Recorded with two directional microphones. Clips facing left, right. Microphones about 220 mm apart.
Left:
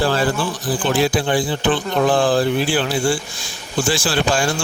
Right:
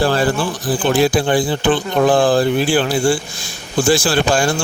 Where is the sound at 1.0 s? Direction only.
45° right (ahead or behind).